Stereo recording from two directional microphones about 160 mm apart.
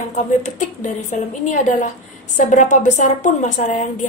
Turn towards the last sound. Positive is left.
turn(degrees=50)  # may be behind; listen again after turning